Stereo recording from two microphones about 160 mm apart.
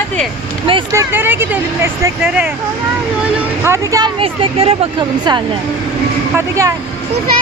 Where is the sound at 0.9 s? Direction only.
15° right (ahead or behind).